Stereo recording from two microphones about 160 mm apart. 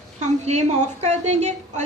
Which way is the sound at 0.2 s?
45° right (ahead or behind).